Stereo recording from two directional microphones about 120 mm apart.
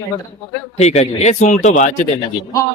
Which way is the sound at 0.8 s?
65° left (ahead or behind).